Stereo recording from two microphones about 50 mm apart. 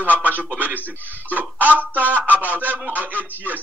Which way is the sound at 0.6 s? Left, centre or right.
Right.